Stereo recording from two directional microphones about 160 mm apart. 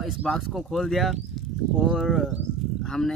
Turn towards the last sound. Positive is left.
turn(degrees=5)  # may be behind; listen again after turning